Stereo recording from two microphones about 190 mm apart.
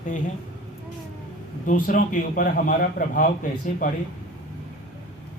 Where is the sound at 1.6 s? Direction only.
45° left (ahead or behind).